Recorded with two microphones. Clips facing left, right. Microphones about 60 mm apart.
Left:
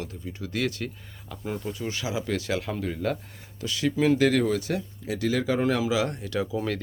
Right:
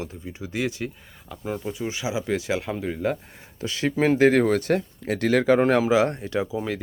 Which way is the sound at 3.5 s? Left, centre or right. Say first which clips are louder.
Right 2 dB; right.